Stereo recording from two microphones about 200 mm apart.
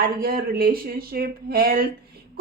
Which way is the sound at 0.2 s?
50° right (ahead or behind).